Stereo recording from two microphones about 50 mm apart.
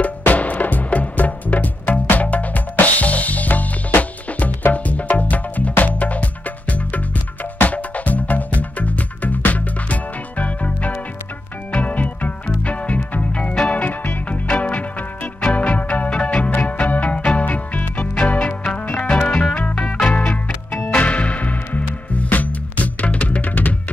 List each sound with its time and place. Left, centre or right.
0.2 s music: left